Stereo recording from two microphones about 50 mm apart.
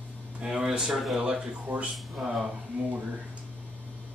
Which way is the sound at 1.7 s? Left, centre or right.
Right.